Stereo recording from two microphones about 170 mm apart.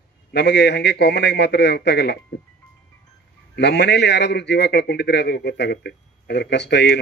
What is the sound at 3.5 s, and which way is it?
A man's voice, 85° left.